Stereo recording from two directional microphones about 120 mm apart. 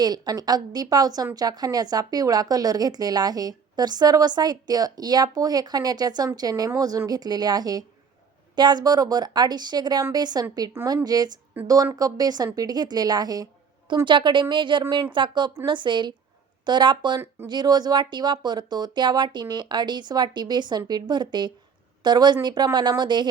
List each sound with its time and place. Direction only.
0.0 s speech: 35° right (ahead or behind)
11.6 s speech: 15° right (ahead or behind)
11.9 s speech: 30° right (ahead or behind)